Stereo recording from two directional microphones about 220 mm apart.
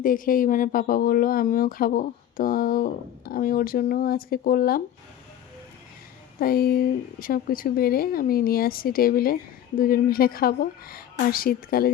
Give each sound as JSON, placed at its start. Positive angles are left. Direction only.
{"t": 0.0, "sound": "speech", "side_deg": 40}
{"t": 6.4, "sound": "speech", "side_deg": 40}